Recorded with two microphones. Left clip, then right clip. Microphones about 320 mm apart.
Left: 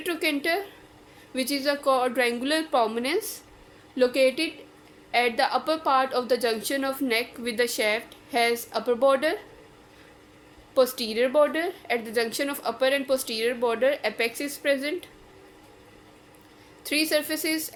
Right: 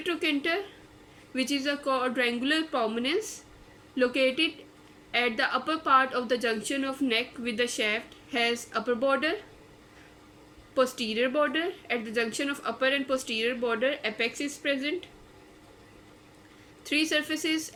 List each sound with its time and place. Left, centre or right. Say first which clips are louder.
0.0 s a woman's voice: left 2 dB; centre
10.8 s a woman's voice: left 4 dB; centre
16.8 s a woman's voice: left 2 dB; centre